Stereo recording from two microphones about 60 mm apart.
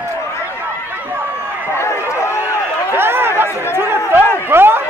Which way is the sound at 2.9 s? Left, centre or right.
Right.